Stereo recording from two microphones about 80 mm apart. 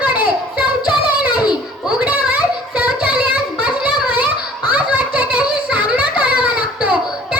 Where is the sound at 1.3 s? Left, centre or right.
Centre.